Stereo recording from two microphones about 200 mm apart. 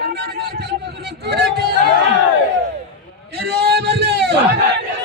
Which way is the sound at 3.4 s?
55° right (ahead or behind).